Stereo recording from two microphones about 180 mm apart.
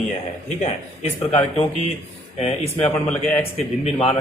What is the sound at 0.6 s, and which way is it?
Speech, 35° left (ahead or behind).